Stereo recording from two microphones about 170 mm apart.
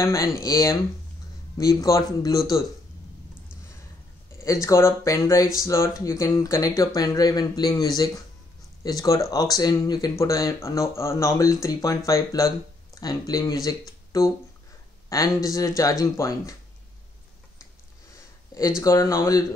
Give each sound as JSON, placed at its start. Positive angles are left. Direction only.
{"t": 0.4, "sound": "speech", "side_deg": 20}
{"t": 4.4, "sound": "speech", "side_deg": 20}
{"t": 18.8, "sound": "speech", "side_deg": 15}